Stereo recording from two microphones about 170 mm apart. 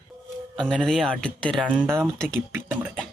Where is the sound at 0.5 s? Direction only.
Centre (ahead or behind).